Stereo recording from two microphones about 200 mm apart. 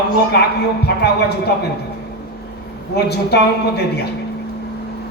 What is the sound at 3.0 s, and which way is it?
Speech, 55° left (ahead or behind).